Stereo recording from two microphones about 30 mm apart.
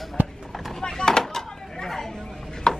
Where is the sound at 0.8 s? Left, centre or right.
Centre.